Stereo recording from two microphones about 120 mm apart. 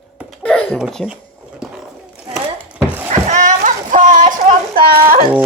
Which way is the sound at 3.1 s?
90° right.